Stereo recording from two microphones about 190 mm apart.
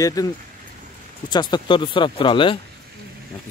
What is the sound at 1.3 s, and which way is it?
Speech, 25° left (ahead or behind).